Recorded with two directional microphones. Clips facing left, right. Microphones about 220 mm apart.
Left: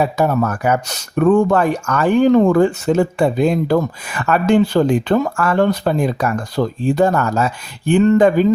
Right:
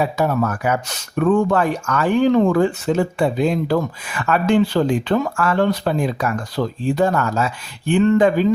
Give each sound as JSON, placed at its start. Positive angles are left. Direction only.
{"t": 0.2, "sound": "speech", "side_deg": 45}